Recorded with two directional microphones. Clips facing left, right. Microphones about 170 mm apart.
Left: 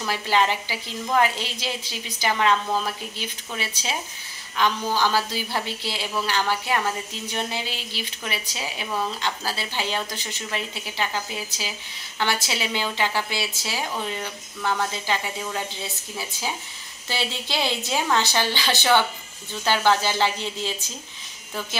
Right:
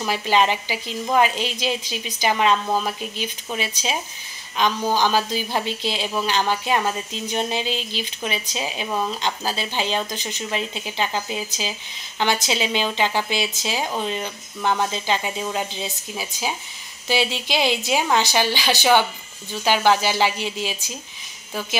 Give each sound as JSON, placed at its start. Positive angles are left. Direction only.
{"t": 0.0, "sound": "a woman's voice", "side_deg": -15}